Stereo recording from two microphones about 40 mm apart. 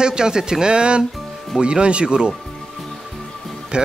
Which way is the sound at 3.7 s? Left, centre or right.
Right.